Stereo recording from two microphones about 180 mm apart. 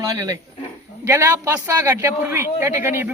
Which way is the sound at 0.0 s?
20° right (ahead or behind).